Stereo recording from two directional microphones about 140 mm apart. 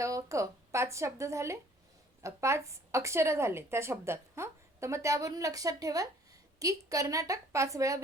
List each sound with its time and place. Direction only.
0.0 s a woman's voice: 20° right (ahead or behind)